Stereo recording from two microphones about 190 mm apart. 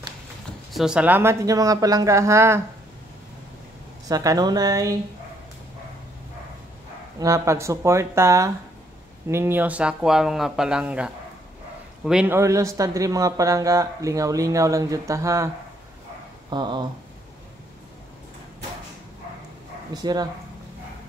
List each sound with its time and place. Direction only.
0.7 s speech: 5° right (ahead or behind)
4.1 s speech: 20° right (ahead or behind)
7.2 s speech: 15° right (ahead or behind)
19.9 s speech: 20° right (ahead or behind)